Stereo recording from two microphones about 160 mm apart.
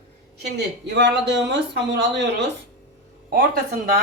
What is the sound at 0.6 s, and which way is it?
Speech, 90° right.